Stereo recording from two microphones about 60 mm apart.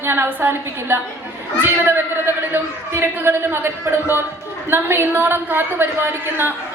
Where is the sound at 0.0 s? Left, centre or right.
Right.